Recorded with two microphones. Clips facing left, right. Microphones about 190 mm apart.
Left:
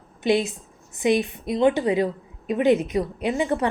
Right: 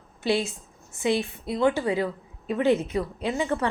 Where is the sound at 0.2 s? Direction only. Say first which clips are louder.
Left 4 dB; 20° left (ahead or behind).